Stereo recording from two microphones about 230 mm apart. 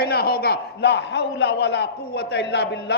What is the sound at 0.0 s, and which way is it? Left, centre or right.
A man's voice, left.